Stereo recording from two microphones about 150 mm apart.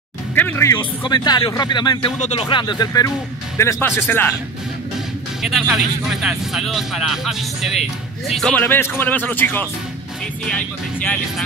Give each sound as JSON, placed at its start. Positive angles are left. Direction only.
{"t": 0.3, "sound": "music", "side_deg": 15}
{"t": 0.7, "sound": "speech", "side_deg": 30}
{"t": 2.1, "sound": "speech", "side_deg": 50}
{"t": 2.4, "sound": "speech", "side_deg": 30}
{"t": 5.4, "sound": "speech", "side_deg": 0}